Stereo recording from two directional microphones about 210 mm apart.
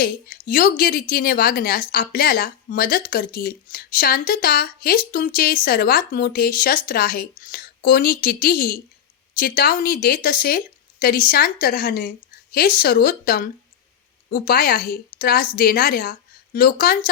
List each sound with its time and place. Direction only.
0.0 s speech: 45° left (ahead or behind)